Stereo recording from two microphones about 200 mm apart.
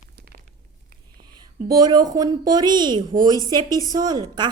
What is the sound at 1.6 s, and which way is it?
A woman's voice, 20° right (ahead or behind).